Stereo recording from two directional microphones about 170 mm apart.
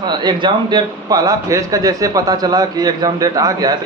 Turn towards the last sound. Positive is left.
turn(degrees=-20)  # may be behind; listen again after turning